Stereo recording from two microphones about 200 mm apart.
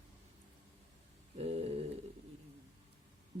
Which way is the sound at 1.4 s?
30° right (ahead or behind).